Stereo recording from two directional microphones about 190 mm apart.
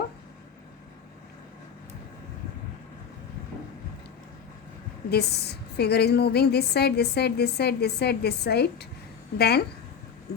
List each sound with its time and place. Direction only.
5.1 s a woman's voice: 60° left (ahead or behind)